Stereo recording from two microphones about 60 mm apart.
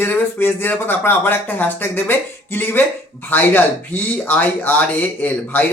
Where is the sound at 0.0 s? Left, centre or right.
Left.